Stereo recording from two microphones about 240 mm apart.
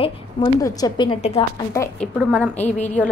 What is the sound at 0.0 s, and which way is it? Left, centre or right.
A woman's voice, centre.